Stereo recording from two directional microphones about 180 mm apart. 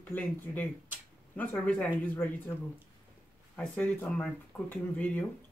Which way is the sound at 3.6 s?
5° left (ahead or behind).